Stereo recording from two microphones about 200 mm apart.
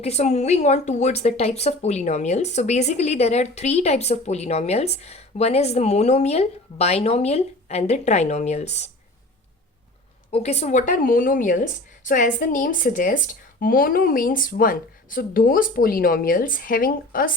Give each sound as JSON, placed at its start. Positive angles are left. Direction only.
{"t": 0.0, "sound": "a woman's voice", "side_deg": 35}
{"t": 10.3, "sound": "speech", "side_deg": 35}